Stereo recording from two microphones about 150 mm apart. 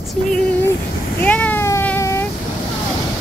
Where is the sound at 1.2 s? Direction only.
10° left (ahead or behind).